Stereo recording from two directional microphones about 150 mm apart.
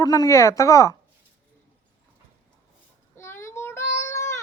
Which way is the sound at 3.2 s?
15° left (ahead or behind).